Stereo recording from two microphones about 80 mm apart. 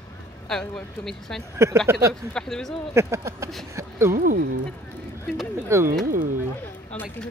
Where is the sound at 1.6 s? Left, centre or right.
Right.